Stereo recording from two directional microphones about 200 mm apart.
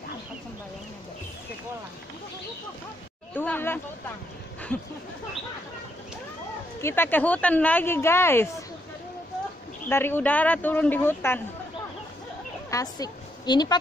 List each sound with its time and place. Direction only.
3.3 s a sound: 10° left (ahead or behind)
6.8 s speech: 10° left (ahead or behind)
9.8 s speech: 10° left (ahead or behind)
12.7 s a woman's voice: 20° left (ahead or behind)